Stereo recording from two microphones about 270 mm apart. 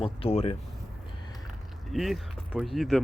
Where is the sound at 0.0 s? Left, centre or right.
Left.